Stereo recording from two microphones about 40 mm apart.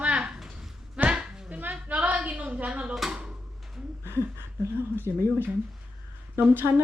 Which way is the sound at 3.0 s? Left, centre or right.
Centre.